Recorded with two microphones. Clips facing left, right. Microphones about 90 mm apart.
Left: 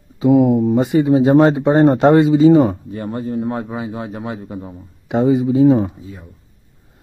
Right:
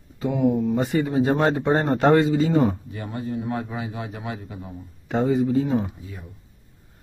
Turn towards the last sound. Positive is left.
turn(degrees=30)  # may be behind; listen again after turning